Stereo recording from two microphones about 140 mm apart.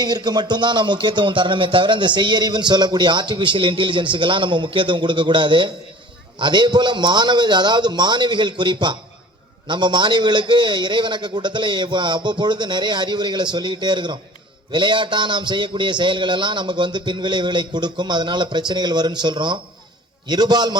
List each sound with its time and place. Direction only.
0.0 s speech: 30° right (ahead or behind)